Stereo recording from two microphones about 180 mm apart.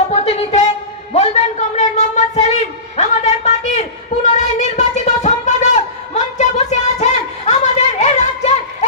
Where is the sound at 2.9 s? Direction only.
40° left (ahead or behind).